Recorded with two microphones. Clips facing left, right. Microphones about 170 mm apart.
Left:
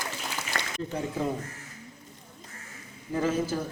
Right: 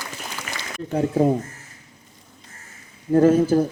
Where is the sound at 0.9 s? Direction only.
50° right (ahead or behind).